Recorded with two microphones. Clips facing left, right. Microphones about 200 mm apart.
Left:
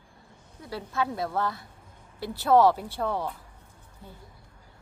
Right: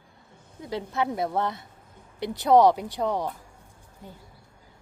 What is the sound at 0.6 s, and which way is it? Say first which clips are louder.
A woman's voice: right 3 dB; 20° right (ahead or behind).